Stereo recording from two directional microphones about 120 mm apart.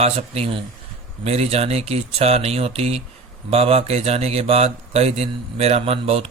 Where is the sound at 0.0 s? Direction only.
60° right (ahead or behind).